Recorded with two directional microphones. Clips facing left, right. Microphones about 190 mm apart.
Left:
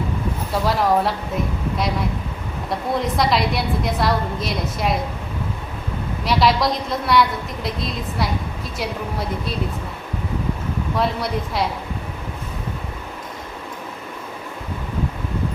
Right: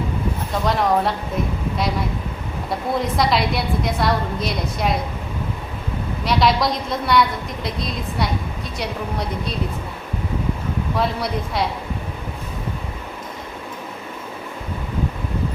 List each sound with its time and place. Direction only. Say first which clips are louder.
0.6 s a woman's voice: even; centre (ahead or behind)
2.6 s a woman's voice: even; centre (ahead or behind)
6.2 s a woman's voice: even; centre (ahead or behind)
10.9 s a woman's voice: left 1 dB; centre (ahead or behind)